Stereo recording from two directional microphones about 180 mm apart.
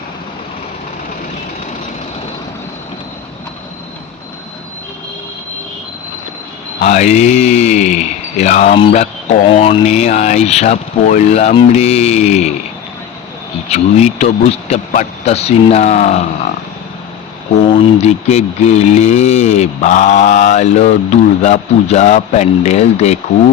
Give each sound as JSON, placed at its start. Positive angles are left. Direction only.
{"t": 6.7, "sound": "speech", "side_deg": 40}
{"t": 13.7, "sound": "speech", "side_deg": 35}
{"t": 17.9, "sound": "speech", "side_deg": 35}